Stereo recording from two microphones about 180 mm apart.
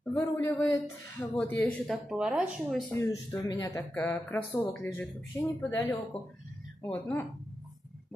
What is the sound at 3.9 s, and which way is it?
Speech, 10° left (ahead or behind).